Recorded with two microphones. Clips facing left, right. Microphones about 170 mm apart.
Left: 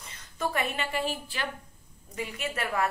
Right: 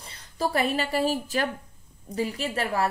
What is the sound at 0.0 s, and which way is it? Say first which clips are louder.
A woman's voice: right 4 dB; 35° right (ahead or behind).